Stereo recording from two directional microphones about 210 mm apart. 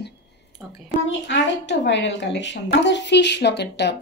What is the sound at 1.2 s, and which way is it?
A woman's voice, 55° left (ahead or behind).